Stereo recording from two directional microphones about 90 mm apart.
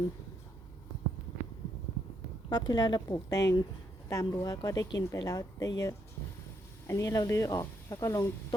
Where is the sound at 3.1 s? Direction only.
40° left (ahead or behind).